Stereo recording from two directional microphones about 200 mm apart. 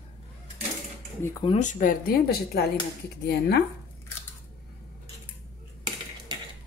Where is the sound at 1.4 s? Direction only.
35° left (ahead or behind); by 3.6 s 55° left (ahead or behind).